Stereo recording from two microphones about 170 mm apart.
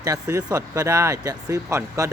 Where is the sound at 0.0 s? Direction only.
20° right (ahead or behind).